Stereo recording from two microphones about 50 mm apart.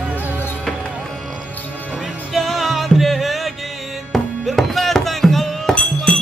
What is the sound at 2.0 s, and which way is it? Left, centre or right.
Music, centre.